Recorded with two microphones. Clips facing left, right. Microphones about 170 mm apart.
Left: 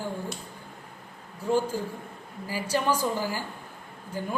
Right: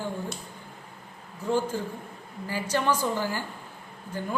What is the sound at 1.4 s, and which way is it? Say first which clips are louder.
Speech: left 1 dB; 10° left (ahead or behind).